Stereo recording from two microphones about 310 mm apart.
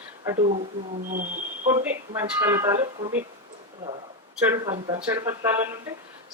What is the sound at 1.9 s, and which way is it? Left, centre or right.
Speech, centre.